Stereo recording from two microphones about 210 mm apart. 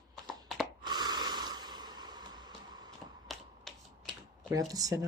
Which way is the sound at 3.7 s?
Centre (ahead or behind).